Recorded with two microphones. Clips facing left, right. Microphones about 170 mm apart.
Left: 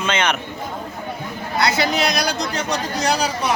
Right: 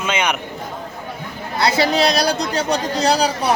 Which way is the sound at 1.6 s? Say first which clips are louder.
Right 3 dB; 30° right (ahead or behind).